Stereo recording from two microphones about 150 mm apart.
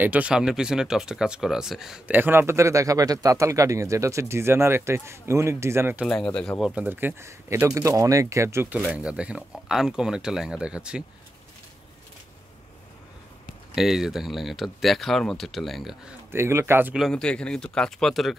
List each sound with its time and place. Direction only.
0.0 s speech: 10° right (ahead or behind)
6.0 s speech: 5° left (ahead or behind)
6.6 s speech: 10° right (ahead or behind)
13.7 s speech: centre (ahead or behind)
16.3 s speech: 15° right (ahead or behind)
16.9 s speech: centre (ahead or behind)